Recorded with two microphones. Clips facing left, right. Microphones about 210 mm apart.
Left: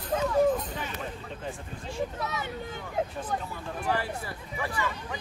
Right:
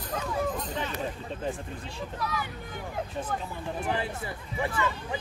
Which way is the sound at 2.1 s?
25° left (ahead or behind).